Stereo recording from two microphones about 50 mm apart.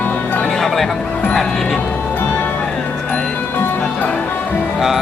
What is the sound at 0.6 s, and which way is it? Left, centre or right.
Speech, centre.